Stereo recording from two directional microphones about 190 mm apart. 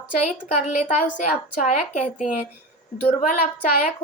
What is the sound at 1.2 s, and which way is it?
A woman's voice, 40° left (ahead or behind).